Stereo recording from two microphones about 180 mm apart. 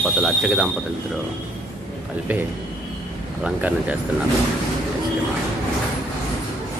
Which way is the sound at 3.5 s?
5° right (ahead or behind).